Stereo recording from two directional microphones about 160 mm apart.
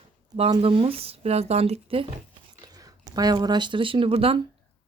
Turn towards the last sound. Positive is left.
turn(degrees=-35)  # may be behind; listen again after turning